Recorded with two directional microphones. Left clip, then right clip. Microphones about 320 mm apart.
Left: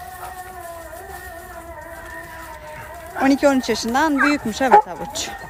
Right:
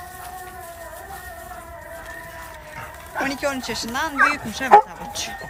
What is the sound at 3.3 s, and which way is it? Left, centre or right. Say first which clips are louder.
A woman's voice: left 12 dB; centre.